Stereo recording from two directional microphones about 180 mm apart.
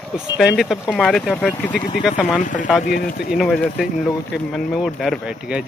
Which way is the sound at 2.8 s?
55° left (ahead or behind).